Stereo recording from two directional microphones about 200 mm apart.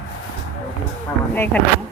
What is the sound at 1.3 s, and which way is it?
Speech, 10° left (ahead or behind).